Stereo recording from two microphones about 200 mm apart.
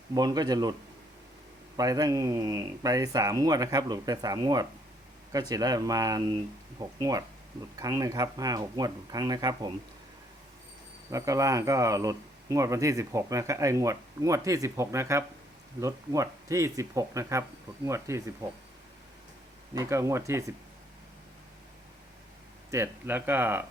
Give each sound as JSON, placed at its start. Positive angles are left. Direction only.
{"t": 0.1, "sound": "speech", "side_deg": -20}
{"t": 1.7, "sound": "speech", "side_deg": -20}
{"t": 11.1, "sound": "speech", "side_deg": -15}
{"t": 19.7, "sound": "speech", "side_deg": -15}
{"t": 22.7, "sound": "speech", "side_deg": -10}